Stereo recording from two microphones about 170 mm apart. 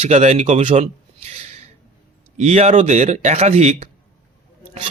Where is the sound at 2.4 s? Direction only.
40° right (ahead or behind).